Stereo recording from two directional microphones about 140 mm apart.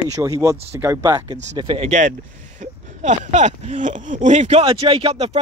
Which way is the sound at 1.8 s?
60° right (ahead or behind).